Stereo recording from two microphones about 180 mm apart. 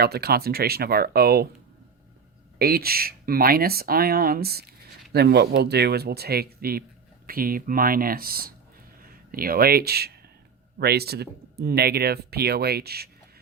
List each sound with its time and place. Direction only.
0.0 s speech: 60° right (ahead or behind)
2.6 s speech: 60° right (ahead or behind)